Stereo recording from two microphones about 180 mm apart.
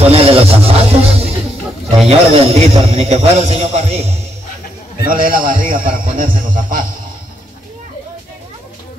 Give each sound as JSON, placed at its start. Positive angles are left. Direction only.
{"t": 0.0, "sound": "a man's voice", "side_deg": -35}
{"t": 5.0, "sound": "a man's voice", "side_deg": -50}